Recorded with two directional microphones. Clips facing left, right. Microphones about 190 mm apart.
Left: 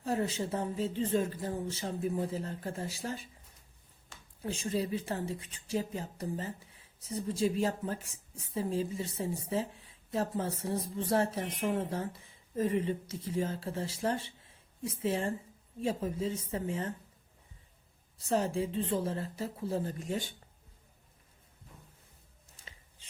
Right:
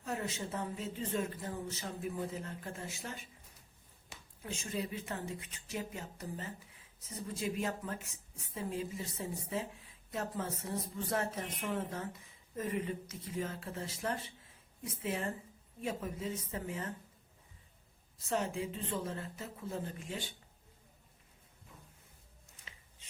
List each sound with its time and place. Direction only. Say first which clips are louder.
0.0 s a woman's voice: left 7 dB; 35° left (ahead or behind)
4.4 s a woman's voice: left 6 dB; 35° left (ahead or behind)
18.2 s a woman's voice: left 5 dB; 35° left (ahead or behind)